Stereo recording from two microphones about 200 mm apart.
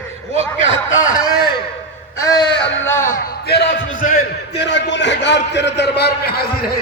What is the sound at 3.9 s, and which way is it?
Speech, 40° left (ahead or behind).